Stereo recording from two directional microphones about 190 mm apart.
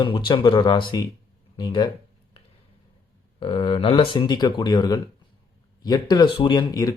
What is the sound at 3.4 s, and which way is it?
Speech, 30° left (ahead or behind).